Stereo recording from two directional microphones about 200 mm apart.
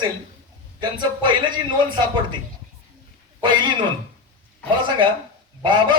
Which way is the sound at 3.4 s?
25° right (ahead or behind).